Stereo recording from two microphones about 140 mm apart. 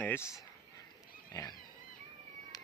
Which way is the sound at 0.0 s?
15° left (ahead or behind).